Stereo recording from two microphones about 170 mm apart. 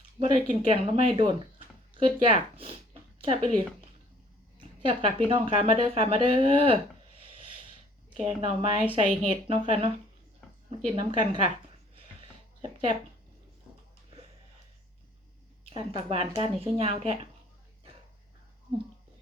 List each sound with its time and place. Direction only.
0.3 s speech: 35° right (ahead or behind)
4.8 s speech: 30° right (ahead or behind)
8.1 s speech: 35° right (ahead or behind)
15.7 s speech: 30° right (ahead or behind)